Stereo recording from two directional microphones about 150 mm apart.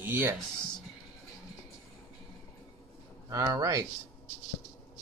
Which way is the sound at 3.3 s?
25° right (ahead or behind).